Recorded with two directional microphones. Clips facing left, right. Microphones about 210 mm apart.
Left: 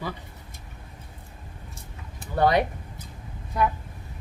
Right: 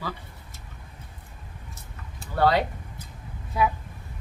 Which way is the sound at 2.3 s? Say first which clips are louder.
Left 1 dB; 20° left (ahead or behind).